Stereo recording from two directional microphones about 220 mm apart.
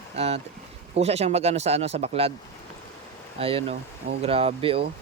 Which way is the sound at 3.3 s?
25° right (ahead or behind).